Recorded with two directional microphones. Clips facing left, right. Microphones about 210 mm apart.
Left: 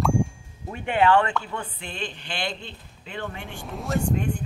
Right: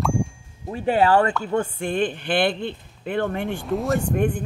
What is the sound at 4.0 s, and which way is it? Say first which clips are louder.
Speech: right 4 dB; 55° right (ahead or behind).